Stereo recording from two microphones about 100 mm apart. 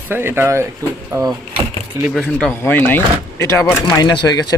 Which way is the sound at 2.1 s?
5° left (ahead or behind).